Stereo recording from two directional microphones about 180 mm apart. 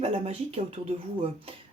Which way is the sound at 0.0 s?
35° right (ahead or behind).